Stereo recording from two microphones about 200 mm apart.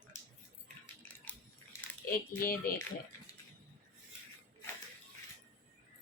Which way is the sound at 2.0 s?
45° left (ahead or behind).